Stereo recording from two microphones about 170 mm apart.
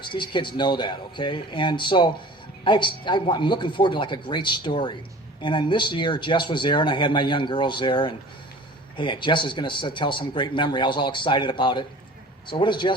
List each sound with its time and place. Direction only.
0.0 s speech: 30° left (ahead or behind)